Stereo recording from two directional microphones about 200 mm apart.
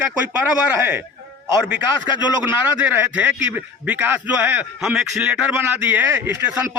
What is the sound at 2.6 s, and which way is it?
A man's voice, 5° right (ahead or behind).